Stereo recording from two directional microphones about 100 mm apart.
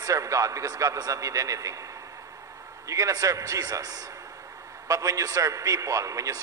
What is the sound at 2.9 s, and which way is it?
A man's voice, 35° right (ahead or behind).